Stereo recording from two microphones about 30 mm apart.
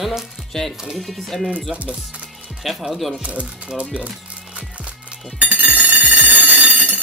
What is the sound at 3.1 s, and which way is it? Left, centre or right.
Speech, right.